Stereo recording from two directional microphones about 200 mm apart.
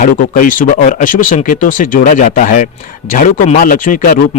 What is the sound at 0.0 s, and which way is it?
Speech, 45° left (ahead or behind).